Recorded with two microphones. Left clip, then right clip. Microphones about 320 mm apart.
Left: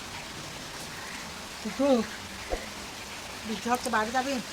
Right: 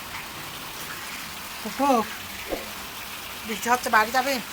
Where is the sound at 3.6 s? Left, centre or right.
Centre.